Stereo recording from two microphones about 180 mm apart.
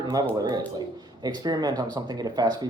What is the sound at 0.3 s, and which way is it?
Speech, 20° right (ahead or behind).